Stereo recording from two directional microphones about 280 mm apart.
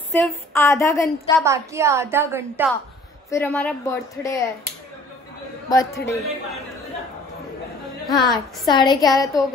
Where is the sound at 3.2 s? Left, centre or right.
Centre.